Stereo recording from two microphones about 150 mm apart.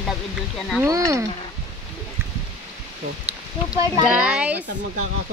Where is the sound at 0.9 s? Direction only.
20° right (ahead or behind).